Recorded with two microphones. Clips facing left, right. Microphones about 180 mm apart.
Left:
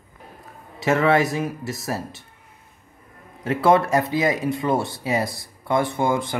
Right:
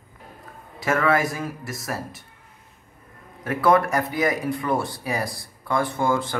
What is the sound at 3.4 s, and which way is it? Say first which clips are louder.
Speech: left 2 dB; 25° left (ahead or behind).